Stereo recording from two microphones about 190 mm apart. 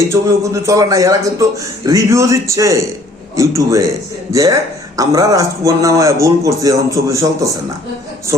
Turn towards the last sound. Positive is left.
turn(degrees=-15)  # may be behind; listen again after turning